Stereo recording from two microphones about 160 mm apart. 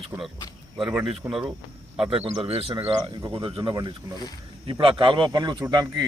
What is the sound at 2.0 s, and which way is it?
A man's voice, 35° right (ahead or behind).